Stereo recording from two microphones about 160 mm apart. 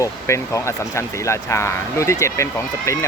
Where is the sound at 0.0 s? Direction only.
20° left (ahead or behind).